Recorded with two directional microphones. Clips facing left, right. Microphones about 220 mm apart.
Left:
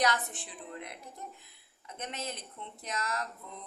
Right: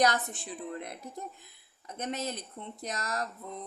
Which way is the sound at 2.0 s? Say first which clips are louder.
Right 5 dB; 40° right (ahead or behind).